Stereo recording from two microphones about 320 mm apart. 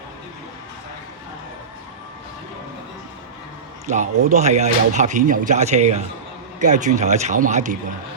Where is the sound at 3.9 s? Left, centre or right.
Right.